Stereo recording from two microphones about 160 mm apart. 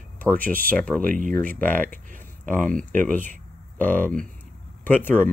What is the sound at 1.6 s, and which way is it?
Speech, 10° left (ahead or behind).